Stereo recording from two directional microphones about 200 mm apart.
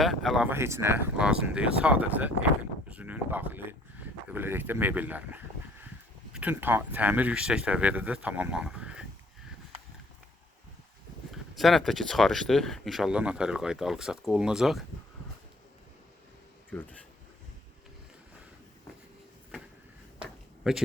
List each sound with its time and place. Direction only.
0.0 s speech: centre (ahead or behind)
11.3 s speech: centre (ahead or behind)
16.7 s speech: 5° left (ahead or behind)
20.7 s speech: 5° right (ahead or behind)